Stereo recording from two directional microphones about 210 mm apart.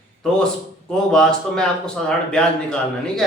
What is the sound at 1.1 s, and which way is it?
Speech, 5° left (ahead or behind).